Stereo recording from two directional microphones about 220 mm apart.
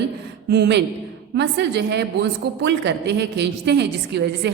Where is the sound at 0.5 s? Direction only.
50° right (ahead or behind).